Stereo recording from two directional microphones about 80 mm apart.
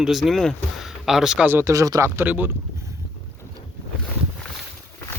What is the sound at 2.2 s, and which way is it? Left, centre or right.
Speech, right.